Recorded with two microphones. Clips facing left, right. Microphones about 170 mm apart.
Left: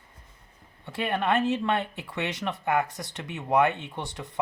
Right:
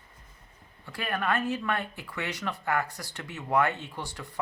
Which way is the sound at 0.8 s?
25° left (ahead or behind).